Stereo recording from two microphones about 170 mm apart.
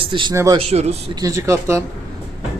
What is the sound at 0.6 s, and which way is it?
Speech, 40° right (ahead or behind).